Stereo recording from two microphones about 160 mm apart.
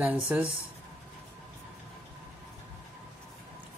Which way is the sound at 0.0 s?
10° right (ahead or behind).